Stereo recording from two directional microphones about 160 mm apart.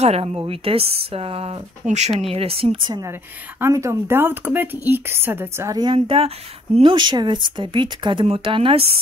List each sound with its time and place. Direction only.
0.0 s speech: 40° right (ahead or behind)
2.9 s a woman's voice: 15° right (ahead or behind)
5.9 s speech: 35° right (ahead or behind)